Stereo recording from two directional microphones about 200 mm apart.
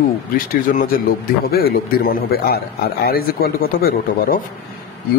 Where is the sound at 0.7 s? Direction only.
45° left (ahead or behind).